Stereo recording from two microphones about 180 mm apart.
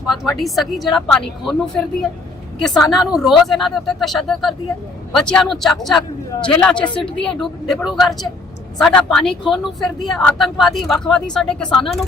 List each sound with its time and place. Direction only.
0.1 s speech: centre (ahead or behind)
6.8 s a woman's voice: 25° left (ahead or behind)
7.2 s speech: 5° left (ahead or behind)